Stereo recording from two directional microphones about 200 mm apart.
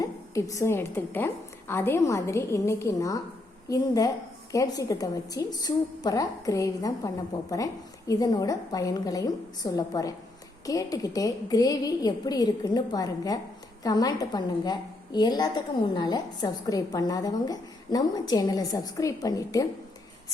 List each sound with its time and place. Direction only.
0.0 s a woman's voice: 15° left (ahead or behind)